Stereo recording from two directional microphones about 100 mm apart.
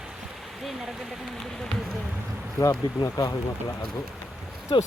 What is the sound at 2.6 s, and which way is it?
Speech, 30° left (ahead or behind).